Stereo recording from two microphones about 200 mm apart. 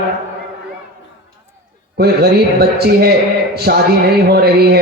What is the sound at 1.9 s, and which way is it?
A man's voice, 50° right (ahead or behind).